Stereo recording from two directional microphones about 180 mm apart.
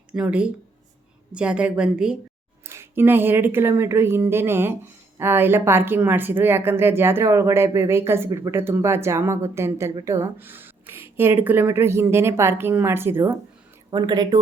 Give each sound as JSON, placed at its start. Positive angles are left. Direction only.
{"t": 0.1, "sound": "speech", "side_deg": -5}
{"t": 13.9, "sound": "speech", "side_deg": -25}